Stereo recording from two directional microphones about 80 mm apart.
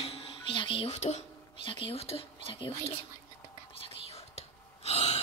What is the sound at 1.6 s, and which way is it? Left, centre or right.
Speech, left.